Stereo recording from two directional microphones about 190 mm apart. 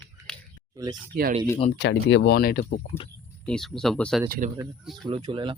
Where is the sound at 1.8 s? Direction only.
60° left (ahead or behind).